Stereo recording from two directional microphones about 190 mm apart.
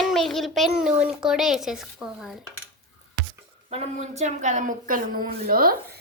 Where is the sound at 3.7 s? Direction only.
35° right (ahead or behind).